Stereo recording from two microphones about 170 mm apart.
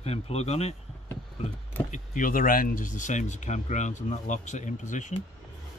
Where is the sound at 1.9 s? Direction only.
50° left (ahead or behind).